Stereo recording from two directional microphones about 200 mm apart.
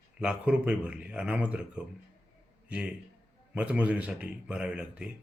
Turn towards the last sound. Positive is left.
turn(degrees=-5)  # may be behind; listen again after turning